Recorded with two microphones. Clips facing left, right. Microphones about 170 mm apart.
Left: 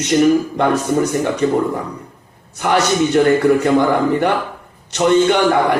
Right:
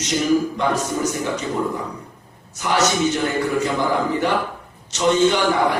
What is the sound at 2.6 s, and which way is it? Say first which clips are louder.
Speech: left 4 dB; 60° left (ahead or behind).